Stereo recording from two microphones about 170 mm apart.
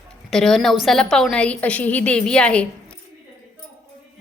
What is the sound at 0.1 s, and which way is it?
A woman's voice, 5° left (ahead or behind).